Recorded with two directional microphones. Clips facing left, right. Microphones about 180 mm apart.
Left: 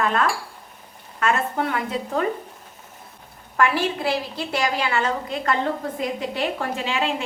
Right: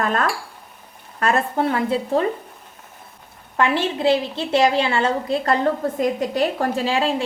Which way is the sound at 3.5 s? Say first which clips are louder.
Right 1 dB; 25° right (ahead or behind).